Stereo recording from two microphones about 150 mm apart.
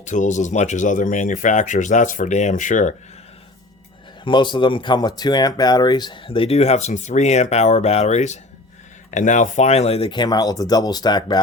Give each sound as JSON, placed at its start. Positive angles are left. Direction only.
{"t": 0.0, "sound": "speech", "side_deg": 55}
{"t": 4.2, "sound": "speech", "side_deg": 30}